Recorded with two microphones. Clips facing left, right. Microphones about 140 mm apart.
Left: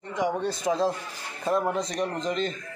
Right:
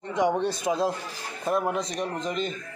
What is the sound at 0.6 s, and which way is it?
A man's voice, 10° right (ahead or behind).